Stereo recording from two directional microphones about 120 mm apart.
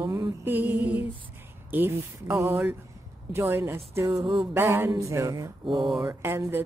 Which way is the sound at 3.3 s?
20° right (ahead or behind).